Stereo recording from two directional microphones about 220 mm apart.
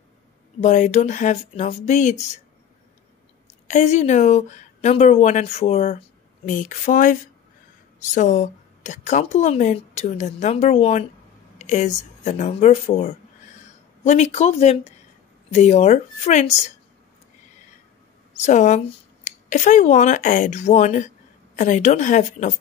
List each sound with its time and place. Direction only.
0.6 s a woman's voice: 35° left (ahead or behind)
3.6 s a woman's voice: 30° left (ahead or behind)
18.4 s a woman's voice: 35° left (ahead or behind)